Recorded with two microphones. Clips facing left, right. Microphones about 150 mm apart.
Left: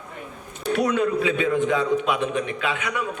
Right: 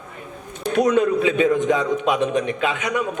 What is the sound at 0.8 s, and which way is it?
A man's voice, 20° right (ahead or behind).